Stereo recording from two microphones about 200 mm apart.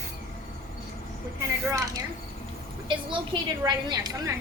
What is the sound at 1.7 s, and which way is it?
Speech, 15° right (ahead or behind).